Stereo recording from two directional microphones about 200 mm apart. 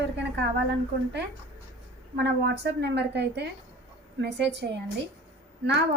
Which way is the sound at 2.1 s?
55° right (ahead or behind).